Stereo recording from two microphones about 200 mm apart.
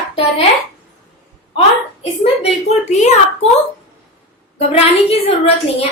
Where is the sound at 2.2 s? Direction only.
30° left (ahead or behind).